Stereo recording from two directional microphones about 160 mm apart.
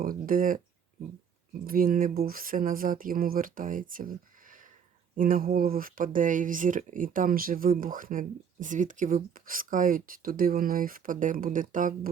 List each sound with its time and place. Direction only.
0.0 s speech: 60° right (ahead or behind)
1.6 s speech: 65° right (ahead or behind)